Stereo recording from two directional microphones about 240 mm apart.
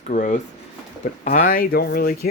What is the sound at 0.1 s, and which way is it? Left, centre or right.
Speech, left.